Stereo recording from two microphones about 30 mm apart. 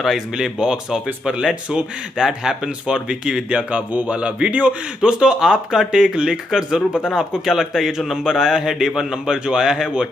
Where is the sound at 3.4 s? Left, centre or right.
Right.